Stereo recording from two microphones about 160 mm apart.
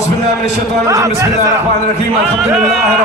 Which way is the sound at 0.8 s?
20° right (ahead or behind).